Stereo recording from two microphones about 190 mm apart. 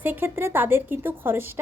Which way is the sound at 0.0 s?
10° right (ahead or behind).